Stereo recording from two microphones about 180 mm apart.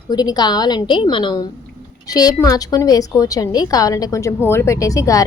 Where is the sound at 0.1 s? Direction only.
20° left (ahead or behind).